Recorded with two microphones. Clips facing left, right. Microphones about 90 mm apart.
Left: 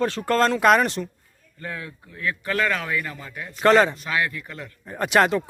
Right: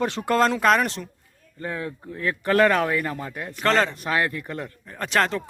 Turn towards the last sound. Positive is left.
turn(degrees=10)  # may be behind; listen again after turning